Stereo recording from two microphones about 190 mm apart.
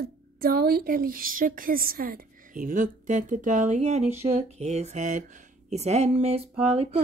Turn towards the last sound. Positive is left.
turn(degrees=-35)  # may be behind; listen again after turning